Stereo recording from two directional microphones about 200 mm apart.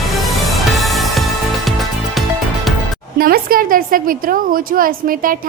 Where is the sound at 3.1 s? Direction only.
45° right (ahead or behind).